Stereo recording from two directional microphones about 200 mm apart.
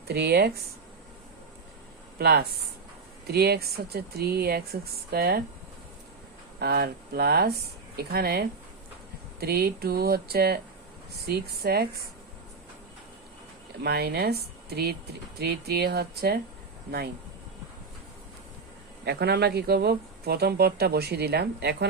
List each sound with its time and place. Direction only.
0.1 s speech: 55° right (ahead or behind)
2.1 s speech: 50° right (ahead or behind)
6.6 s speech: 55° right (ahead or behind)
13.8 s speech: 55° right (ahead or behind)
19.0 s speech: 55° right (ahead or behind)